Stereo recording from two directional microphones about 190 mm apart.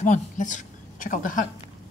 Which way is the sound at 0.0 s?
40° left (ahead or behind).